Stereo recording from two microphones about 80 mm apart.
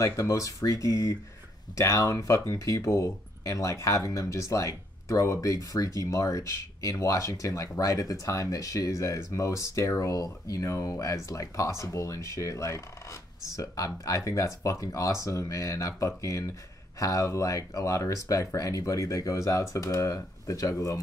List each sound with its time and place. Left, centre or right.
0.0 s speech: left